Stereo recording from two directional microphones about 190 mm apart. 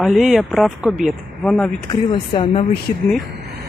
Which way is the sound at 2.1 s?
25° left (ahead or behind).